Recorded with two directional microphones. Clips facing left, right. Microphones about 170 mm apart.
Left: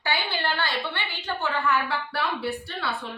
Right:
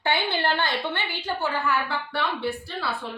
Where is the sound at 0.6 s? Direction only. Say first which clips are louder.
Right 2 dB; 15° right (ahead or behind).